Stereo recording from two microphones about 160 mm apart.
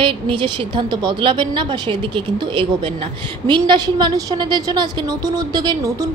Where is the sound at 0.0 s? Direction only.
30° right (ahead or behind).